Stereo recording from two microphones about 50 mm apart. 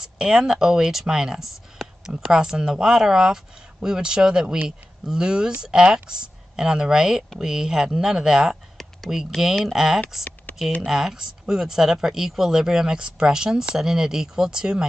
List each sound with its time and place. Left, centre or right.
0.0 s speech: centre
8.8 s a sound: centre
9.7 s speech: centre
10.5 s typing: left
10.9 s speech: centre